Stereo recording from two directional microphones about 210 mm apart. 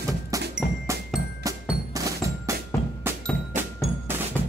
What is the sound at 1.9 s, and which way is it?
Percussion, 15° right (ahead or behind).